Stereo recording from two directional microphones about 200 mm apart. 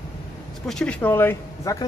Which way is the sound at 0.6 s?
5° left (ahead or behind).